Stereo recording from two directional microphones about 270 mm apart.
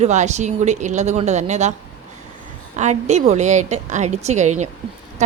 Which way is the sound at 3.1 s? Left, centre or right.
Right.